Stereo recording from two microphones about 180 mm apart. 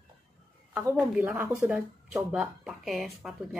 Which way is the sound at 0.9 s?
10° right (ahead or behind).